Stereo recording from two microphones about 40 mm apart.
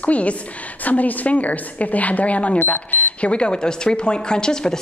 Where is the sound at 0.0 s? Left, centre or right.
Left.